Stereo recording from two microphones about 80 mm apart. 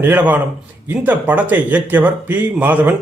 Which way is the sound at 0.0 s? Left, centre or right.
Right.